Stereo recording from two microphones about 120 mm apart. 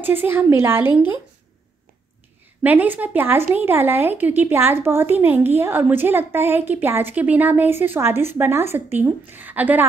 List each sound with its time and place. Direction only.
0.0 s speech: 15° right (ahead or behind)
2.6 s speech: 15° right (ahead or behind)